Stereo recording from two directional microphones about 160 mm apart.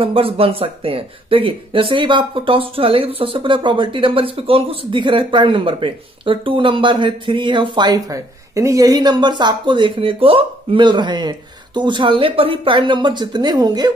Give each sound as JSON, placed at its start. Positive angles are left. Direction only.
{"t": 0.0, "sound": "speech", "side_deg": -35}